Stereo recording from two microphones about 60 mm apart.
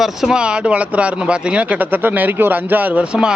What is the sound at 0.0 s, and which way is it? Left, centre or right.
Speech, centre.